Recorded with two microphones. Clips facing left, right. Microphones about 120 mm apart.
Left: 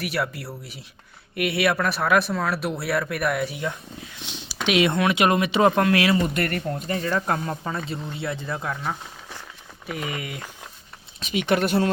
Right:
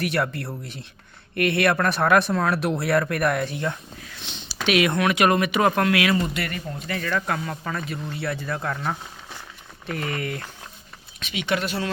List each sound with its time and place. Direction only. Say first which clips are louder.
0.0 s speech: right 3 dB; 5° left (ahead or behind); by 6.2 s 30° left (ahead or behind)
6.3 s speech: left 4 dB; 50° left (ahead or behind)
6.8 s speech: even; 30° left (ahead or behind)
8.6 s speech: right 1 dB; centre (ahead or behind)
11.2 s speech: left 4 dB; 45° left (ahead or behind)